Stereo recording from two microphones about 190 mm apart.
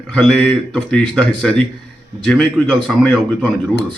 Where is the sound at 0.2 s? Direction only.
5° left (ahead or behind).